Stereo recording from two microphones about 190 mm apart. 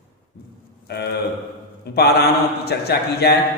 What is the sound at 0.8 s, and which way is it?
A man's voice, 60° left (ahead or behind).